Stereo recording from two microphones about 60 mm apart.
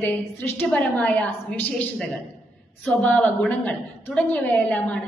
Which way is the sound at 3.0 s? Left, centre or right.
Left.